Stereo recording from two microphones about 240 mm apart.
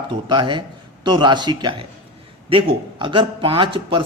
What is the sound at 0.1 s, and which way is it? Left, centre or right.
A man's voice, centre.